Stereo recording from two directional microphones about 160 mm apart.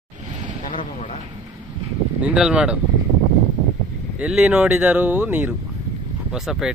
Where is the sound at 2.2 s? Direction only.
5° right (ahead or behind).